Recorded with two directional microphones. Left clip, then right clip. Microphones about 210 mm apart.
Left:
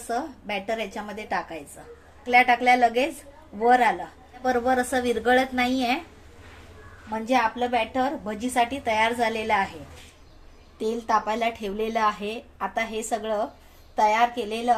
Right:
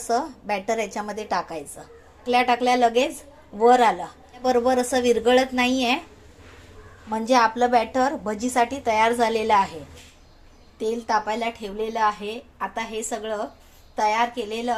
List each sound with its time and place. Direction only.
0.1 s a woman's voice: 20° right (ahead or behind)
7.1 s a woman's voice: 25° right (ahead or behind)
10.8 s a woman's voice: centre (ahead or behind)